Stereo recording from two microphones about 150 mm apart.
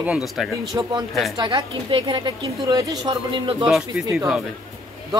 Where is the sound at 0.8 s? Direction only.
20° right (ahead or behind).